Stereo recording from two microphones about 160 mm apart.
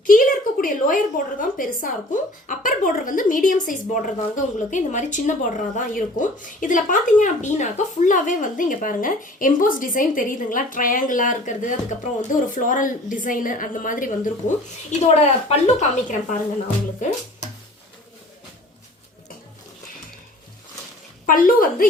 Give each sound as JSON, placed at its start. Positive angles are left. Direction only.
{"t": 0.0, "sound": "a woman's voice", "side_deg": 60}
{"t": 15.0, "sound": "speech", "side_deg": 40}
{"t": 21.2, "sound": "a woman's voice", "side_deg": 60}